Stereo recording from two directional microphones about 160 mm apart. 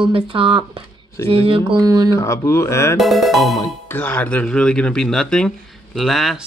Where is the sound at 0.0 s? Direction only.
35° right (ahead or behind).